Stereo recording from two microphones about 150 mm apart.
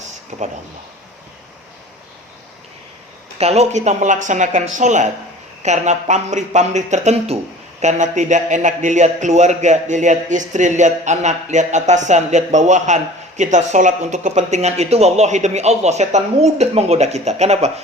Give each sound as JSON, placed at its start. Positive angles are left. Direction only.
{"t": 0.3, "sound": "a man's voice", "side_deg": -50}
{"t": 3.3, "sound": "a man's voice", "side_deg": -45}